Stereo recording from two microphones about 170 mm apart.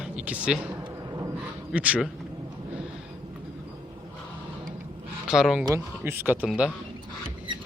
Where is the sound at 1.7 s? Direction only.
10° right (ahead or behind).